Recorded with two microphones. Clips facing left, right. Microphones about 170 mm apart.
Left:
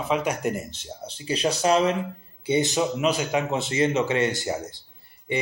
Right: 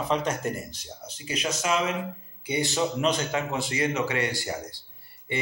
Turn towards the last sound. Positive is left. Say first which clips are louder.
# left 4 dB
turn(degrees=20)  # may be behind; listen again after turning